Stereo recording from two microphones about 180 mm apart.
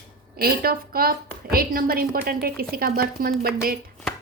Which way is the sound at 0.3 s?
55° right (ahead or behind).